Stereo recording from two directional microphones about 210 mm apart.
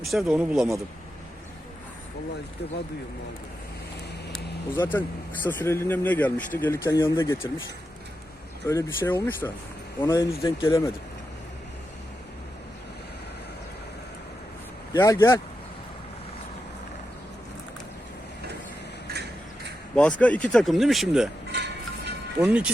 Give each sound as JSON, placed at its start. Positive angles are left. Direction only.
{"t": 0.0, "sound": "speech", "side_deg": 0}
{"t": 4.8, "sound": "speech", "side_deg": 10}
{"t": 8.6, "sound": "speech", "side_deg": 10}
{"t": 14.9, "sound": "speech", "side_deg": 15}
{"t": 20.0, "sound": "speech", "side_deg": 5}
{"t": 21.5, "sound": "music", "side_deg": -55}
{"t": 22.4, "sound": "speech", "side_deg": -5}